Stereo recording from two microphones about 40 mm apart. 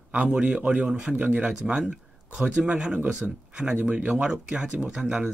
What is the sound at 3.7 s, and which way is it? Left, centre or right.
Speech, right.